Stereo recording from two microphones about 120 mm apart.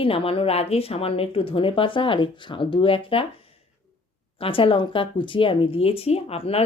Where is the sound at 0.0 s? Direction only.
50° left (ahead or behind).